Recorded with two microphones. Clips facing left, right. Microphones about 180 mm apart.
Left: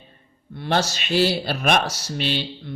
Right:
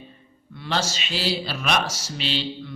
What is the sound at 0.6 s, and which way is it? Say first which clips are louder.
Speech: left 4 dB; 55° left (ahead or behind).